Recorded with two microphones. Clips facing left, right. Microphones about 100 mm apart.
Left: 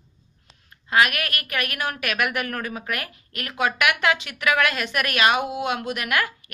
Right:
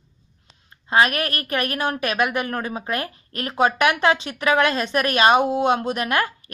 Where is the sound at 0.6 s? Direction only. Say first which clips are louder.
Right 2 dB; 30° right (ahead or behind).